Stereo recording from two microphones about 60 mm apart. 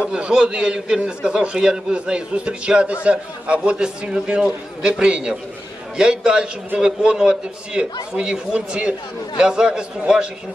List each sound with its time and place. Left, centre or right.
0.0 s a man's voice: centre